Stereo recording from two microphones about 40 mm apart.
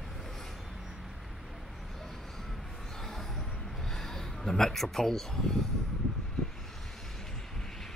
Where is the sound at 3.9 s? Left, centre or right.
Centre.